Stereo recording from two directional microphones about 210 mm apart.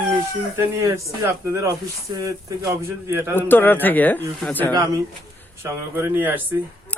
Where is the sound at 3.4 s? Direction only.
10° left (ahead or behind).